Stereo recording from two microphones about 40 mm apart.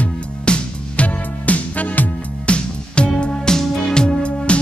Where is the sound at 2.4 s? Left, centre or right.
Left.